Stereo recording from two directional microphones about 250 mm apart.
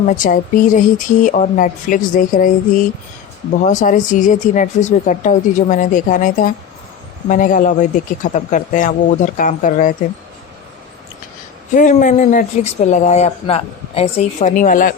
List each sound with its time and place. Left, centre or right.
0.1 s speech: left
11.7 s speech: left